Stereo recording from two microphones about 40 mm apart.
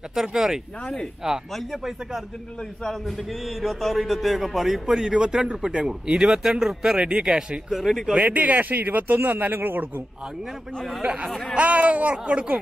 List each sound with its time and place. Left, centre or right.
0.1 s speech: centre
1.5 s a man's voice: centre
7.8 s a man's voice: centre
8.2 s a man's voice: right
11.5 s speech: right
12.1 s speech: right